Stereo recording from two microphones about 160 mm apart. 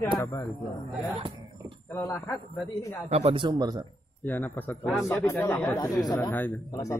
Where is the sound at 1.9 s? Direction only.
15° left (ahead or behind).